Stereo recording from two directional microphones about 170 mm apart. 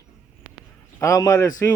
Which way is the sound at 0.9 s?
20° left (ahead or behind).